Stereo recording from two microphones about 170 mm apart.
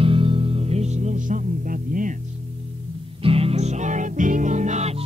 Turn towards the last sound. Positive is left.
turn(degrees=-45)  # may be behind; listen again after turning